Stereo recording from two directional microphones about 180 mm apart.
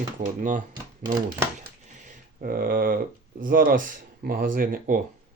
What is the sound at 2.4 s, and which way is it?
Speech, 55° right (ahead or behind).